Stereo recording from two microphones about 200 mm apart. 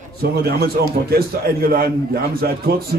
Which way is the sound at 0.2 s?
50° right (ahead or behind).